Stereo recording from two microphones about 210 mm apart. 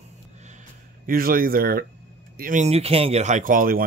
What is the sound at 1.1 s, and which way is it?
A man's voice, 45° right (ahead or behind).